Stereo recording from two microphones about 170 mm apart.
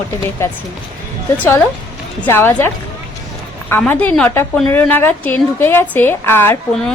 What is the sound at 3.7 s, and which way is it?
A woman's voice, 10° left (ahead or behind).